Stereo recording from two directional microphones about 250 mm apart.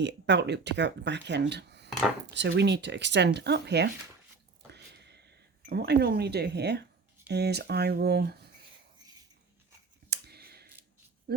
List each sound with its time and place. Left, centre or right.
0.0 s speech: right
4.7 s a sound: right
7.3 s speech: right
10.1 s clicking: right
11.3 s speech: right